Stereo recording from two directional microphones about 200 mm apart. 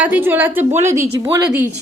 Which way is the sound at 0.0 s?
10° right (ahead or behind).